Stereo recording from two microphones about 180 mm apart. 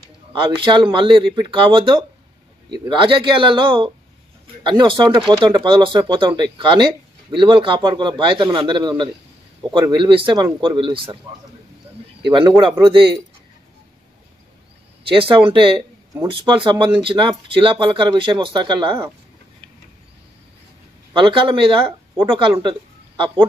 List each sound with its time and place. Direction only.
0.3 s speech: 25° right (ahead or behind)
12.3 s speech: 25° right (ahead or behind)
15.0 s speech: 30° right (ahead or behind)
21.1 s speech: 30° right (ahead or behind)